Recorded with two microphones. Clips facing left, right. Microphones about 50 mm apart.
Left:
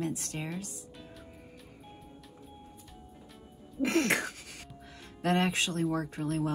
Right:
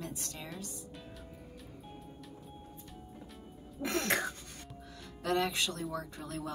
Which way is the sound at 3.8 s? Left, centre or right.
Left.